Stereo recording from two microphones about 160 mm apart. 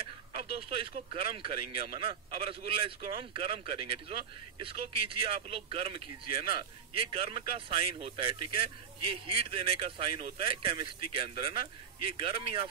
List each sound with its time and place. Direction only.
0.0 s speech: 35° right (ahead or behind)